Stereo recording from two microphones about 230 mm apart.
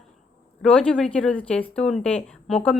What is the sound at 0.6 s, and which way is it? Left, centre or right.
A woman's voice, centre.